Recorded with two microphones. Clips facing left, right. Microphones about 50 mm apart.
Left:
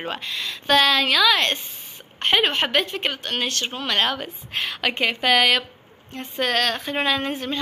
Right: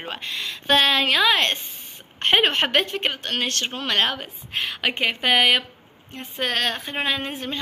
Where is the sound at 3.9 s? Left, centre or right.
Right.